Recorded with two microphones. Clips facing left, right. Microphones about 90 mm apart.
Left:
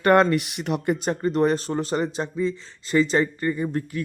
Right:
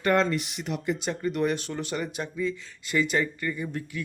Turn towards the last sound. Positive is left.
turn(degrees=40)  # may be behind; listen again after turning